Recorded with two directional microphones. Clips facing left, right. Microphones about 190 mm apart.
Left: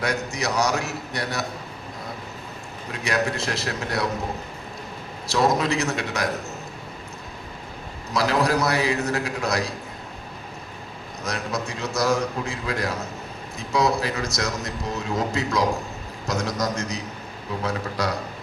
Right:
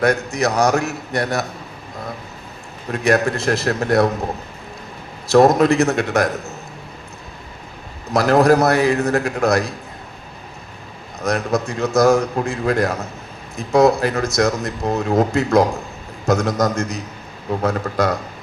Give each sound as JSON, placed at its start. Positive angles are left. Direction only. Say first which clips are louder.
{"t": 0.0, "sound": "speech", "louder": "right 8 dB", "side_deg": -50}
{"t": 2.9, "sound": "speech", "louder": "right 8 dB", "side_deg": -50}
{"t": 5.3, "sound": "speech", "louder": "right 9 dB", "side_deg": -50}
{"t": 8.1, "sound": "speech", "louder": "right 8 dB", "side_deg": -50}
{"t": 11.2, "sound": "speech", "louder": "right 9 dB", "side_deg": -50}